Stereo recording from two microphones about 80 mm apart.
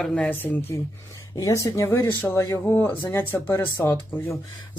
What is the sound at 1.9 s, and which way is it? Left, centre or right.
Speech, left.